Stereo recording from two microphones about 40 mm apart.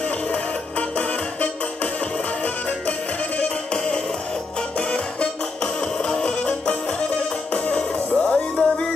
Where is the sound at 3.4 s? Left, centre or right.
Centre.